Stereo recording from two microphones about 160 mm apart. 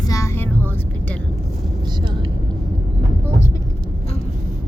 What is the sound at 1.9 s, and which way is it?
Vehicle, 25° right (ahead or behind).